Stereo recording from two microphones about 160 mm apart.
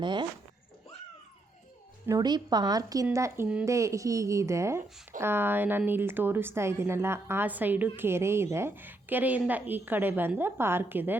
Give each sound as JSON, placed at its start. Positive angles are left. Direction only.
{"t": 0.0, "sound": "a woman's voice", "side_deg": -30}
{"t": 2.0, "sound": "a woman's voice", "side_deg": -25}